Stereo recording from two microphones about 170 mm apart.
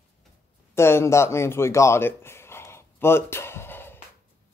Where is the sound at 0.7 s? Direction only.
15° left (ahead or behind).